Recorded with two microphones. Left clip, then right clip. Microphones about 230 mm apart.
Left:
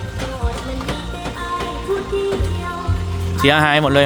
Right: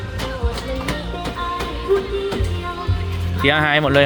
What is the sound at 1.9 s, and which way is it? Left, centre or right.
Music, left.